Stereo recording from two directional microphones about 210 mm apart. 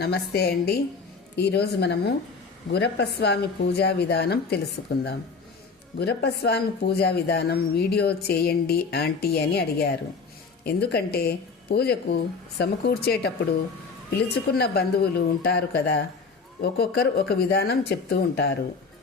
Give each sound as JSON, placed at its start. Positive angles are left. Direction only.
{"t": 0.0, "sound": "a woman's voice", "side_deg": 50}